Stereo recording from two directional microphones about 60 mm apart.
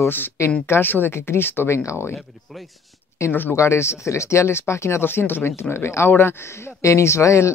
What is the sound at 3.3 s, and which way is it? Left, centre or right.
Speech, left.